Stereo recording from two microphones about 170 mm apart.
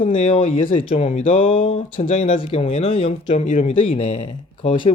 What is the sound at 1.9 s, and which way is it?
Speech, 50° left (ahead or behind).